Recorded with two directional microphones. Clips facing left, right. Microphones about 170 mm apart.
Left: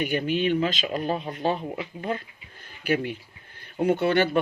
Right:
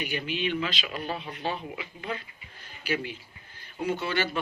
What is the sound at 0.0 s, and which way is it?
Speech, 50° left (ahead or behind).